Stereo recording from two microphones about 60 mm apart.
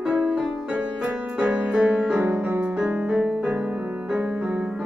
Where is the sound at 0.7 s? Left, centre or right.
Right.